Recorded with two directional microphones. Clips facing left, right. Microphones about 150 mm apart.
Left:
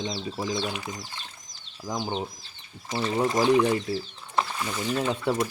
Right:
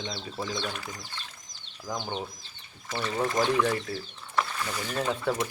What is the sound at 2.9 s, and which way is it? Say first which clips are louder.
Speech: left 4 dB; 25° left (ahead or behind).